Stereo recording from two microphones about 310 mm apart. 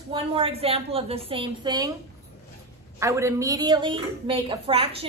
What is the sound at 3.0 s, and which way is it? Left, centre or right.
A woman's voice, centre.